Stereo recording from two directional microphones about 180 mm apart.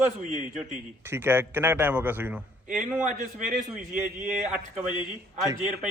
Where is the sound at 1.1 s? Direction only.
10° right (ahead or behind).